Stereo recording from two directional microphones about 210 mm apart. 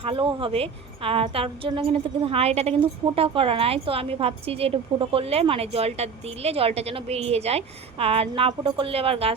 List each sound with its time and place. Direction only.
0.0 s a woman's voice: 25° right (ahead or behind)